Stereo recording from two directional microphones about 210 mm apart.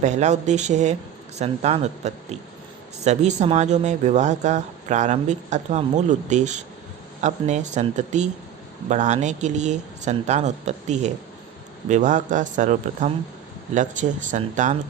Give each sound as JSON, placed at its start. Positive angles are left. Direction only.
{"t": 0.0, "sound": "speech", "side_deg": -35}